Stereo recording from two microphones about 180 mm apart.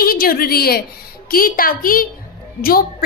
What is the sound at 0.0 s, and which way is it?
A woman's voice, 55° left (ahead or behind).